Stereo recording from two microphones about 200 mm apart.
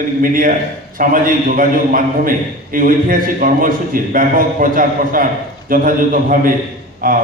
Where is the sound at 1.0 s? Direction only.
45° right (ahead or behind).